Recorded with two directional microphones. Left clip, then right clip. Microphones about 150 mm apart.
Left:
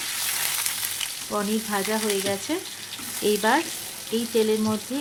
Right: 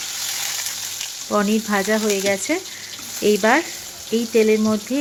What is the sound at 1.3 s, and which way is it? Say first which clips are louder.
Speech: right 8 dB; 40° right (ahead or behind).